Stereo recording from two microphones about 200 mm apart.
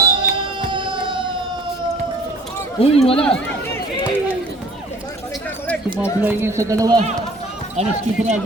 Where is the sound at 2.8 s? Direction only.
30° left (ahead or behind).